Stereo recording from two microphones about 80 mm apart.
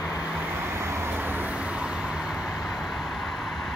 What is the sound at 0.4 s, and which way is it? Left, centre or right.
Vehicle, right.